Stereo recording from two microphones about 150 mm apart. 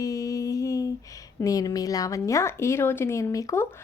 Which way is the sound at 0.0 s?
25° left (ahead or behind).